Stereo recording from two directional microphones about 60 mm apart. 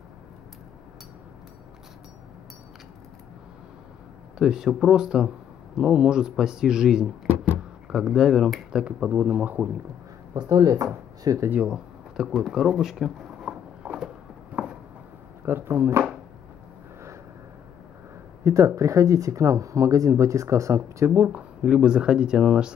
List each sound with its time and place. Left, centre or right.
4.4 s speech: centre
9.1 s speech: right
10.5 s speech: right
11.5 s speech: centre
12.2 s speech: centre
13.4 s a sound: centre
15.4 s speech: right
18.4 s speech: right
21.1 s speech: right
21.4 s speech: centre